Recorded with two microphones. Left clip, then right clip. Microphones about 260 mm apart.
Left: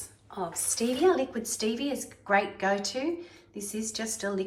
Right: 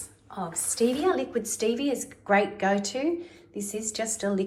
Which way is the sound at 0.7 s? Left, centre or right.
Centre.